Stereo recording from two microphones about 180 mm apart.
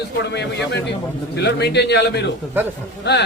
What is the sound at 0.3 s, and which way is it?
A man's voice, 75° left (ahead or behind).